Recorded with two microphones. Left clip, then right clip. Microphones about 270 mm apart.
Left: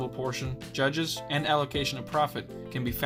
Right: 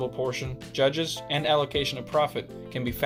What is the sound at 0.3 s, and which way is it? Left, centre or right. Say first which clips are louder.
Speech: right 3 dB; left.